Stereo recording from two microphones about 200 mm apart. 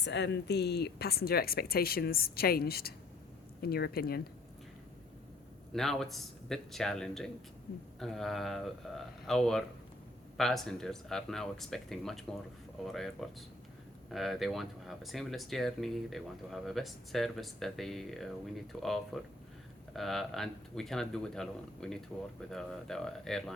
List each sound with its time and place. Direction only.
0.0 s speech: 60° left (ahead or behind)
5.7 s speech: centre (ahead or behind)